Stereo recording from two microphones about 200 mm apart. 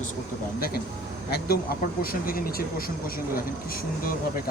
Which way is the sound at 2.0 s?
45° left (ahead or behind).